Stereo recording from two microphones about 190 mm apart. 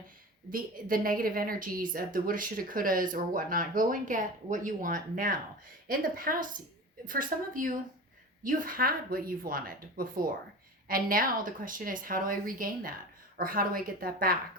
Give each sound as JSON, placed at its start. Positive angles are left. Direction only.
{"t": 0.5, "sound": "a woman's voice", "side_deg": -50}